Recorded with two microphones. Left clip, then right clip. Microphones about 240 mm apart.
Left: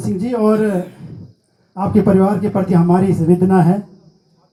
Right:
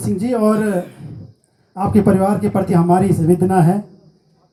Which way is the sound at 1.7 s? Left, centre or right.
Right.